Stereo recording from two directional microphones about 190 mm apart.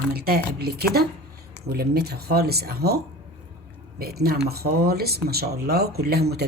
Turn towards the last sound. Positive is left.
turn(degrees=-55)  # may be behind; listen again after turning